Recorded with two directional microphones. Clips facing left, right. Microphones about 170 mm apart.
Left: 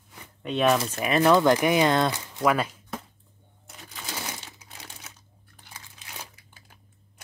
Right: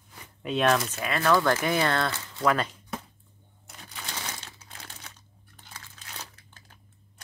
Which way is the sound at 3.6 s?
Centre (ahead or behind).